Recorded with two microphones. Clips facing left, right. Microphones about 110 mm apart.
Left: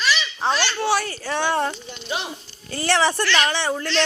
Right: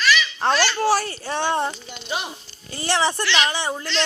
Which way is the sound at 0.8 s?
35° right (ahead or behind).